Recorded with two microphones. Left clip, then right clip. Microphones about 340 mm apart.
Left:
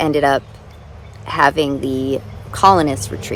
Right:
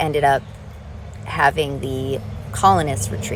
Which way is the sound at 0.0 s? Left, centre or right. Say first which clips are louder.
Left 2 dB; centre.